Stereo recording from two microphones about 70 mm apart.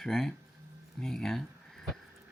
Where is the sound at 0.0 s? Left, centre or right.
Centre.